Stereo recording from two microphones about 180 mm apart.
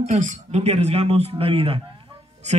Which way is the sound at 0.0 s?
45° right (ahead or behind).